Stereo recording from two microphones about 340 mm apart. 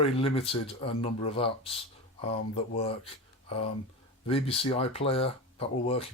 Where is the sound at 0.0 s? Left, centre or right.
Centre.